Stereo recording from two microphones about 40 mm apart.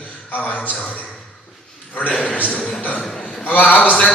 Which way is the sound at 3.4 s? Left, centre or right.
Left.